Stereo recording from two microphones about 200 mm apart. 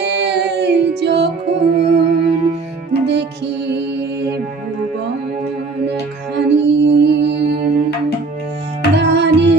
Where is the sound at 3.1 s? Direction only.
55° right (ahead or behind).